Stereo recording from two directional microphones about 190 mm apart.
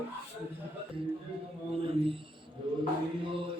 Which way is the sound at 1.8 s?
30° right (ahead or behind).